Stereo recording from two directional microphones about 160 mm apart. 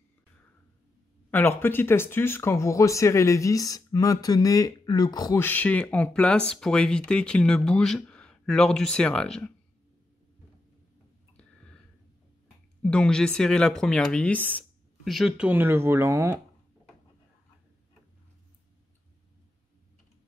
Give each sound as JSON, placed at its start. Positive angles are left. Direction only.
{"t": 1.3, "sound": "speech", "side_deg": 15}
{"t": 5.4, "sound": "speech", "side_deg": 10}
{"t": 11.3, "sound": "a sound", "side_deg": 5}
{"t": 12.8, "sound": "speech", "side_deg": 5}
{"t": 15.0, "sound": "speech", "side_deg": 0}